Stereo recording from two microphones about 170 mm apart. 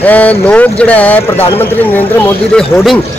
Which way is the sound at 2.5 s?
Centre (ahead or behind).